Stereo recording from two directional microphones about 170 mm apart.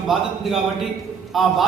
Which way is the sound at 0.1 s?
Centre (ahead or behind).